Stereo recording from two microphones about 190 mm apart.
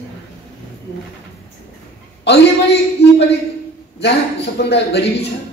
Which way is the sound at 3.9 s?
60° left (ahead or behind).